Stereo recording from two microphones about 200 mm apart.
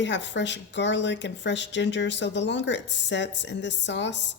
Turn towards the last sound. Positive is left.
turn(degrees=60)  # may be behind; listen again after turning